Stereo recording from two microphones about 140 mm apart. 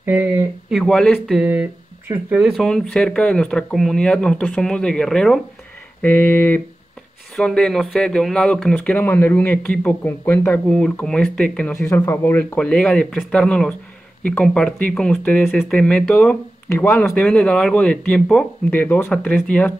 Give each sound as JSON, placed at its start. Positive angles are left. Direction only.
{"t": 0.0, "sound": "speech", "side_deg": -15}
{"t": 2.5, "sound": "speech", "side_deg": 0}
{"t": 16.6, "sound": "speech", "side_deg": 20}
{"t": 17.0, "sound": "speech", "side_deg": 10}